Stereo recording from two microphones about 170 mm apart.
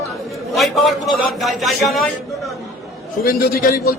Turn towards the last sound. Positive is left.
turn(degrees=65)  # may be behind; listen again after turning